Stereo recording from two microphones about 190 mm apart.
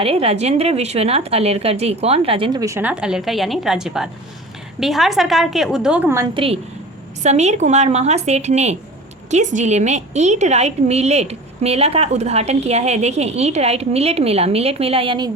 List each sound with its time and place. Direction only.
0.0 s a woman's voice: 30° right (ahead or behind); by 6.2 s 10° right (ahead or behind)
6.3 s a woman's voice: 30° right (ahead or behind)